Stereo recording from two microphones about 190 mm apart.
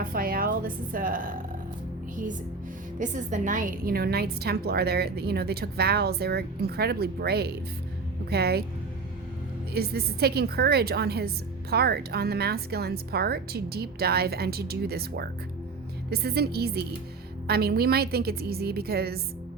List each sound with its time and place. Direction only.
0.0 s a woman's voice: 50° right (ahead or behind)
3.0 s a woman's voice: 40° right (ahead or behind); by 8.6 s 55° right (ahead or behind)
9.7 s a woman's voice: 55° right (ahead or behind)